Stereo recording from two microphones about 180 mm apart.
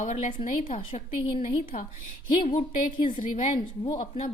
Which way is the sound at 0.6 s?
30° left (ahead or behind).